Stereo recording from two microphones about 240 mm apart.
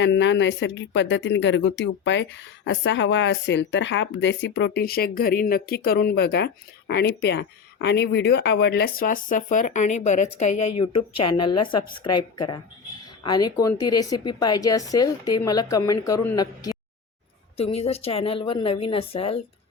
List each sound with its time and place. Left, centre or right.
0.0 s speech: left
10.5 s speech: left
13.2 s a woman's voice: centre